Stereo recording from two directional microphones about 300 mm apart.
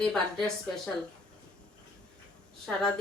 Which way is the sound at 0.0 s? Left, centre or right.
Centre.